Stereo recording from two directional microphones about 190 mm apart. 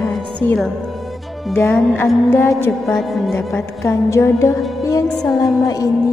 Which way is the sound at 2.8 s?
Centre (ahead or behind).